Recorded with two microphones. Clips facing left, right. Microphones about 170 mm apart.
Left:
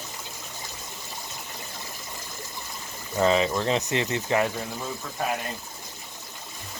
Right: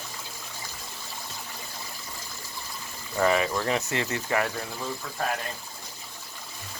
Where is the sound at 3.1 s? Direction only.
20° left (ahead or behind).